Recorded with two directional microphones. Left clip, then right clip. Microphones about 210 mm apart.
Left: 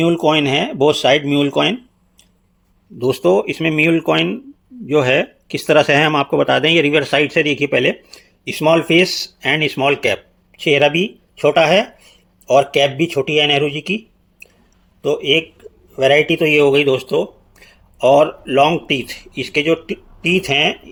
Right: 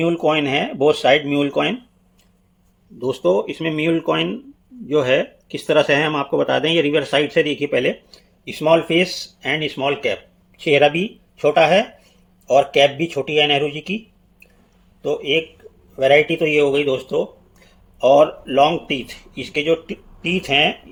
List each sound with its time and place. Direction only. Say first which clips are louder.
0.0 s speech: left 3 dB; 35° left (ahead or behind)
3.0 s speech: left 4 dB; 40° left (ahead or behind)